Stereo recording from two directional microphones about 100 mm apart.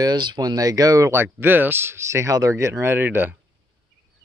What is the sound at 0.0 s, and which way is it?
Speech, 45° right (ahead or behind).